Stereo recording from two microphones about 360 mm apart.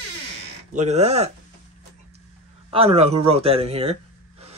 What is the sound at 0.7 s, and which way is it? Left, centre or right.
Speech, centre.